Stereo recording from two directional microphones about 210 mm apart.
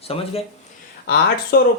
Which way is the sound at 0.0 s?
30° left (ahead or behind).